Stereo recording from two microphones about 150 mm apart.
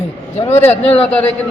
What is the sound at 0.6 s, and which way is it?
Speech, 40° left (ahead or behind).